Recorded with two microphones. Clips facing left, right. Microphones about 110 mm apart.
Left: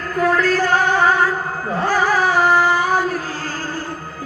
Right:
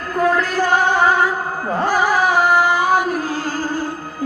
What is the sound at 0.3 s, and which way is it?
Music, 15° right (ahead or behind).